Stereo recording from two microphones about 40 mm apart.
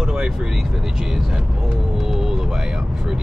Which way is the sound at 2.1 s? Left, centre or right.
Centre.